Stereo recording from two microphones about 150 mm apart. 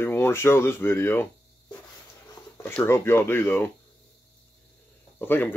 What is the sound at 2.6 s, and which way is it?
Speech, 15° left (ahead or behind).